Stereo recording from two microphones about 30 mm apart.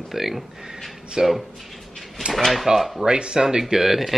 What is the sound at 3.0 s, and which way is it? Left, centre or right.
Speech, right.